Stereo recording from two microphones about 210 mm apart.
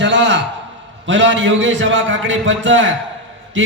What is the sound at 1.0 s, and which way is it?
A man's voice, 60° right (ahead or behind).